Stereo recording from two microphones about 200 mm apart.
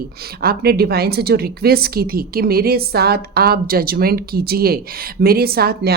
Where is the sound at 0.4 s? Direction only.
50° right (ahead or behind).